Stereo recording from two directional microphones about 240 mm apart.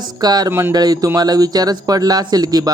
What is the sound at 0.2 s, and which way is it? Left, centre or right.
Speech, centre.